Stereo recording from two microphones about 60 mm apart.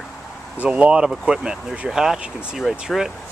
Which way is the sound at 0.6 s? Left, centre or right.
Right.